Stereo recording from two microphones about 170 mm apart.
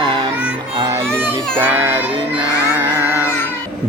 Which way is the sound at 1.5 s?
10° right (ahead or behind).